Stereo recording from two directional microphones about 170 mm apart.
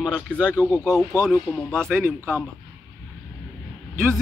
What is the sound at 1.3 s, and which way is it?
Speech, centre (ahead or behind).